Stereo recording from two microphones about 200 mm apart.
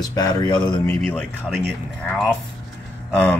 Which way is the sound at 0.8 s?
10° left (ahead or behind).